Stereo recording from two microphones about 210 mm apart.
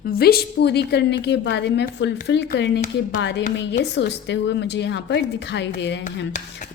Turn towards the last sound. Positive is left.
turn(degrees=55)  # may be behind; listen again after turning